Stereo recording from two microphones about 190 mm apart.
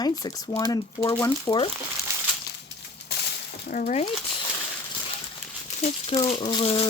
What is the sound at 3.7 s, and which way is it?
Speech, 40° left (ahead or behind).